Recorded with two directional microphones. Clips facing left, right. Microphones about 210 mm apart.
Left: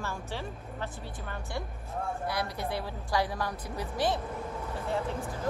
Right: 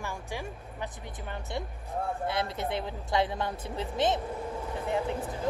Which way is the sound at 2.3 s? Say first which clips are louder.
Right 2 dB; 20° right (ahead or behind).